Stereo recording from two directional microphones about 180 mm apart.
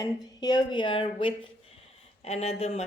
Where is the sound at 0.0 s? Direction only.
25° left (ahead or behind).